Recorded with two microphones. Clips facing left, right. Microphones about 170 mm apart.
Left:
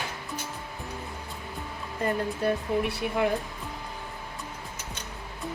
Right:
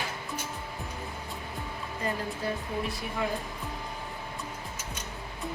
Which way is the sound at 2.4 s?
65° left (ahead or behind).